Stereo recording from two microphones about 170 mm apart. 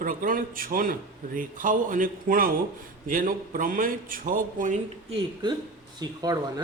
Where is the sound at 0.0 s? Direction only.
55° right (ahead or behind).